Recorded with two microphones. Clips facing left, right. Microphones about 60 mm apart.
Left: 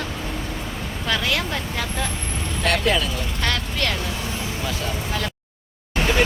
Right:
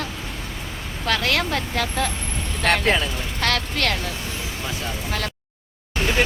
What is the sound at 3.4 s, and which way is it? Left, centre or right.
Speech, right.